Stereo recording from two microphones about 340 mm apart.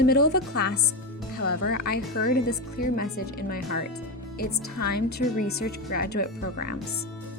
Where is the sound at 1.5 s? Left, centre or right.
Left.